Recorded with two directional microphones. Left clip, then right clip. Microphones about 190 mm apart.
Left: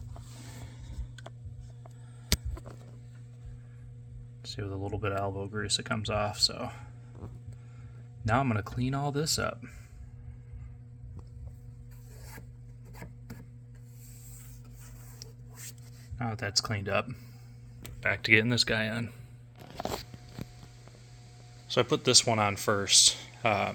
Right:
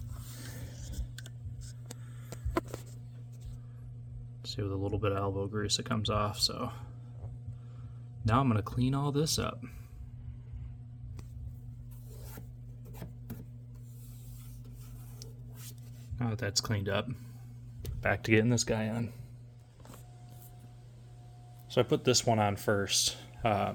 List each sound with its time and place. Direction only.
4.4 s speech: 5° left (ahead or behind)
8.4 s speech: 10° left (ahead or behind)
13.0 s chopping: 25° right (ahead or behind)
16.1 s speech: centre (ahead or behind)
18.0 s speech: 25° right (ahead or behind)
18.4 s speech: 10° right (ahead or behind)
21.7 s speech: centre (ahead or behind)